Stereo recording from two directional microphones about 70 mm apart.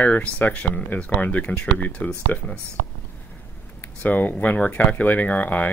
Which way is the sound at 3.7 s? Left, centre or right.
Left.